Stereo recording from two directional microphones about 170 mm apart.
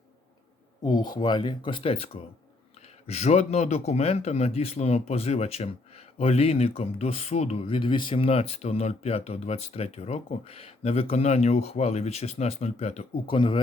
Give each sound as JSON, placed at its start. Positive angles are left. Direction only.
{"t": 0.9, "sound": "speech", "side_deg": 25}
{"t": 3.1, "sound": "speech", "side_deg": 40}